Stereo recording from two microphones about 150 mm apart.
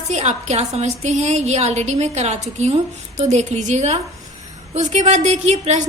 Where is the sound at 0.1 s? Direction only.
50° right (ahead or behind).